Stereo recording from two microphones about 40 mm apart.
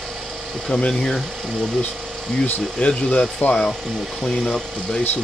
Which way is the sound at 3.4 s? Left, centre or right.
Left.